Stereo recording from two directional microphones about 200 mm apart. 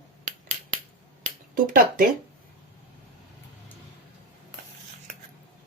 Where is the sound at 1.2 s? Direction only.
45° right (ahead or behind).